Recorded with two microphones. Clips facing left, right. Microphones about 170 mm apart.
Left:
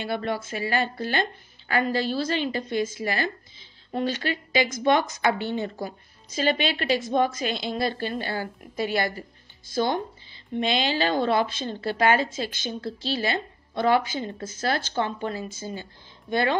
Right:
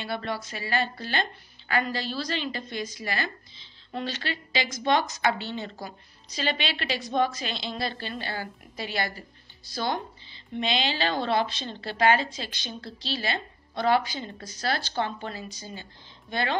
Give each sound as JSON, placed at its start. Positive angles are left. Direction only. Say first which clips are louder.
{"t": 0.0, "sound": "a woman's voice", "louder": "left 4 dB", "side_deg": 50}